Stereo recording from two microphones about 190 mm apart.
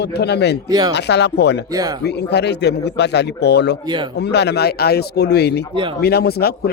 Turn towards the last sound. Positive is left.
turn(degrees=55)  # may be behind; listen again after turning